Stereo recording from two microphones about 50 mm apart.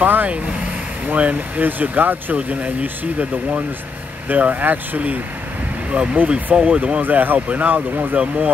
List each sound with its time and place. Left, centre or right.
0.0 s speech: right